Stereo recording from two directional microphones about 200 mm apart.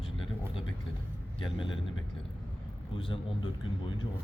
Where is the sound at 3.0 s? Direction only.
25° left (ahead or behind).